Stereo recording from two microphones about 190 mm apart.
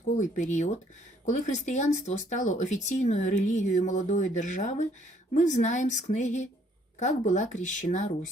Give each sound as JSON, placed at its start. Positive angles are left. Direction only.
{"t": 0.2, "sound": "speech", "side_deg": 40}